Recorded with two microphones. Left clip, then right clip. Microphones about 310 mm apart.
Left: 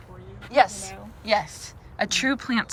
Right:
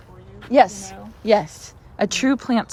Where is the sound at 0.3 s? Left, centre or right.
Right.